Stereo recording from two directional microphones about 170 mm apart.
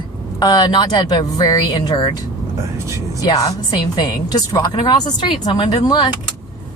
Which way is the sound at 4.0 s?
25° left (ahead or behind).